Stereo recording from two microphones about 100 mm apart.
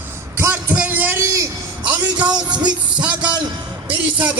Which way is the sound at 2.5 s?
45° right (ahead or behind).